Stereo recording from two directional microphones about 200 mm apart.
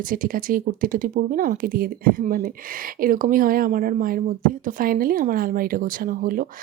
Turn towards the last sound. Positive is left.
turn(degrees=-45)  # may be behind; listen again after turning